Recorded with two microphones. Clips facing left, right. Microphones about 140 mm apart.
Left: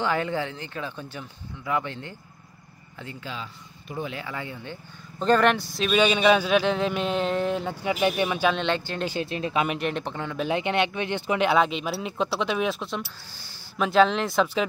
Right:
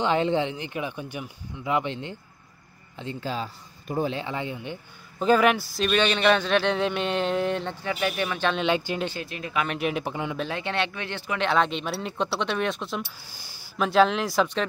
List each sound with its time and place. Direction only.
0.0 s speech: 20° right (ahead or behind)
3.2 s speech: 40° right (ahead or behind)
4.1 s speech: 25° right (ahead or behind)
5.2 s speech: 5° right (ahead or behind)
7.8 s speech: 15° left (ahead or behind)
8.5 s speech: 5° right (ahead or behind)
9.1 s speech: 25° left (ahead or behind)
9.7 s speech: 5° right (ahead or behind)
10.5 s speech: 15° left (ahead or behind)